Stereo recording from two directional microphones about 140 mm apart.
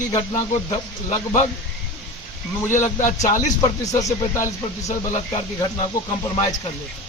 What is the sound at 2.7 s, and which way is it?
Speech, 60° left (ahead or behind).